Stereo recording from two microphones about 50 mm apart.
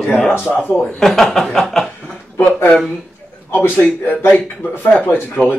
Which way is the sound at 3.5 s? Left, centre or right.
Left.